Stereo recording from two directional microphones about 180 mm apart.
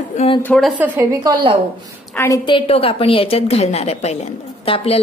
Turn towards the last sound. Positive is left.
turn(degrees=35)  # may be behind; listen again after turning